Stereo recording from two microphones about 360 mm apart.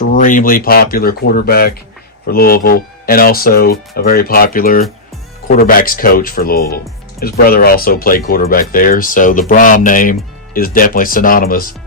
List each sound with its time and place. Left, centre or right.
0.1 s speech: left